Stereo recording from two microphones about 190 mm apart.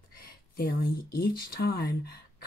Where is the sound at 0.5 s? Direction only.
50° left (ahead or behind).